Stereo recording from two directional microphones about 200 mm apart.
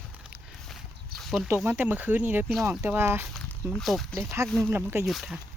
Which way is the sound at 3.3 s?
5° left (ahead or behind).